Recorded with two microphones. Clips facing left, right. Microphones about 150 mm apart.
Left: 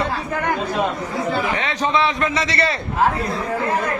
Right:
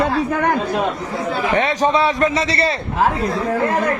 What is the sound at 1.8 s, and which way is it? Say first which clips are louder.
Speech: right 1 dB; 40° right (ahead or behind).